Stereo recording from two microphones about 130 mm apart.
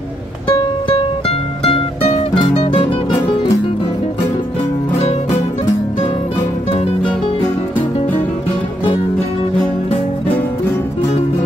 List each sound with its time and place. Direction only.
0.5 s music: 45° left (ahead or behind)
6.7 s music: 50° left (ahead or behind)